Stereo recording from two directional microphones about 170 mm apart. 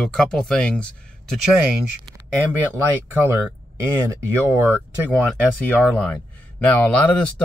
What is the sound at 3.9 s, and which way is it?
Speech, 15° right (ahead or behind).